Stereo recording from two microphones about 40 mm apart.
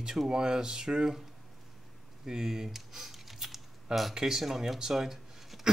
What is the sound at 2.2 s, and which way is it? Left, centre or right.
Typing, centre.